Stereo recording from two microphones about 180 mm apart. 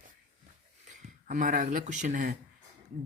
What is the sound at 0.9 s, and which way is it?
Speech, 45° right (ahead or behind).